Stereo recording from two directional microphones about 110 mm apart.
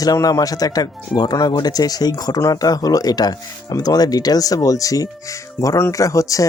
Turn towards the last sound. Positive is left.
turn(degrees=30)  # may be behind; listen again after turning